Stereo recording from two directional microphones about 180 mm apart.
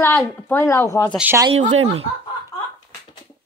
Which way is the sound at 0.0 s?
15° left (ahead or behind).